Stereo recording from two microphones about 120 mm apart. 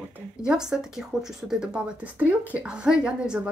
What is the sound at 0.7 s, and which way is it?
A woman's voice, 5° right (ahead or behind).